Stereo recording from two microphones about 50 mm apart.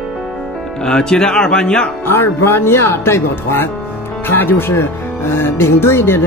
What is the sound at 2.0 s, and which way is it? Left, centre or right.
Speech, left.